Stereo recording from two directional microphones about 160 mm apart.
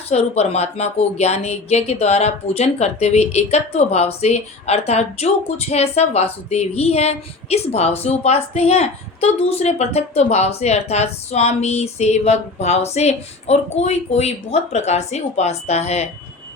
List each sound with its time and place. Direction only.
0.1 s a woman's voice: 40° left (ahead or behind)